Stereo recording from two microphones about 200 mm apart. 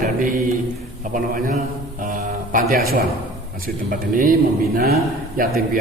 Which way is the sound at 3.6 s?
45° right (ahead or behind).